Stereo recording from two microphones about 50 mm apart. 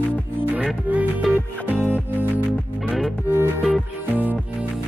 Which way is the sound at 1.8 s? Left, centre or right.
Right.